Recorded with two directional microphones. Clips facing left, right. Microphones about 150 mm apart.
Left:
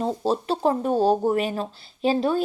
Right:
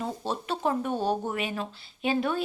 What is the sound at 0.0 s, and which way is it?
A woman's voice, 35° left (ahead or behind).